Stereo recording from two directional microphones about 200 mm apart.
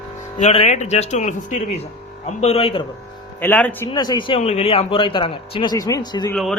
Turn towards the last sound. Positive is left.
turn(degrees=0)  # may be behind; listen again after turning